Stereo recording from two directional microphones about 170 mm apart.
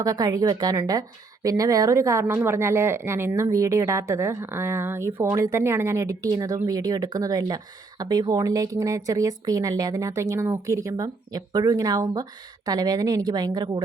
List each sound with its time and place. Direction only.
0.0 s a woman's voice: 20° right (ahead or behind)